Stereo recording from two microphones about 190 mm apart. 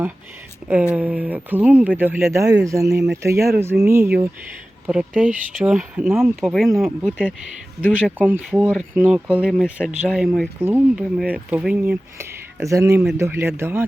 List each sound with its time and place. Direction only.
0.7 s speech: 10° right (ahead or behind)
6.4 s speech: centre (ahead or behind)
9.0 s speech: 10° right (ahead or behind)
12.5 s speech: 15° right (ahead or behind)